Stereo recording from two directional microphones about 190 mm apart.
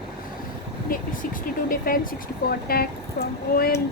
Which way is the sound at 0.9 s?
50° left (ahead or behind).